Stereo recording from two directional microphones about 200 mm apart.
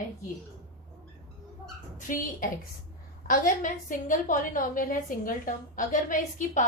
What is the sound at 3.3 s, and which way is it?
A woman's voice, 45° left (ahead or behind).